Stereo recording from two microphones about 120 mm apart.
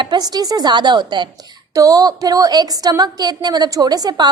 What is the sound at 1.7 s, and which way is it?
A woman's voice, 30° right (ahead or behind).